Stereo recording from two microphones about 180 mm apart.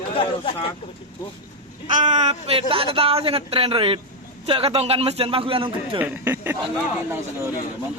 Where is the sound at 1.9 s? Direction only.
40° right (ahead or behind).